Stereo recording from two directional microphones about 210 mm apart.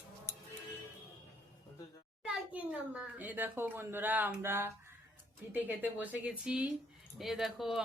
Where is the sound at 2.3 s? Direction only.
5° right (ahead or behind).